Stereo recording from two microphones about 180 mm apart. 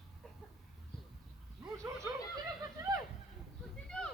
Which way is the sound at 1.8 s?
15° right (ahead or behind).